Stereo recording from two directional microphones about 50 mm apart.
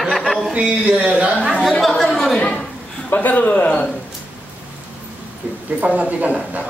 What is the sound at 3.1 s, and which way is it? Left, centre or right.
Speech, left.